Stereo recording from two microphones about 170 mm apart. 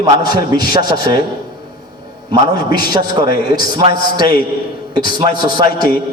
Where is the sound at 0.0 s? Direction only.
25° right (ahead or behind).